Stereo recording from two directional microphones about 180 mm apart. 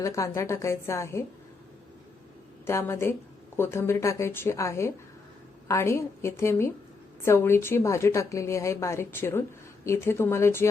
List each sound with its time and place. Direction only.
0.0 s speech: 15° left (ahead or behind)
2.6 s speech: 15° left (ahead or behind)